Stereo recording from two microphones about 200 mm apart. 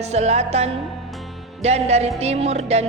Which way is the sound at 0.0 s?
35° right (ahead or behind).